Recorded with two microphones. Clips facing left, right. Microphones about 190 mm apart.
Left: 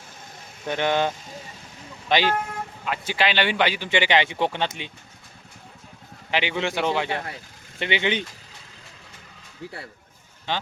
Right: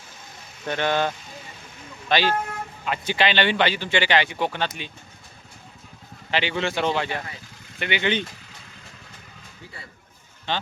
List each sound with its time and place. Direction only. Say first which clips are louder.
0.6 s speech: left 1 dB; 15° left (ahead or behind)
2.8 s speech: right 1 dB; 5° left (ahead or behind); by 4.9 s 20° left (ahead or behind)
6.3 s speech: even; 15° left (ahead or behind)
7.8 s speech: left 1 dB; 25° left (ahead or behind)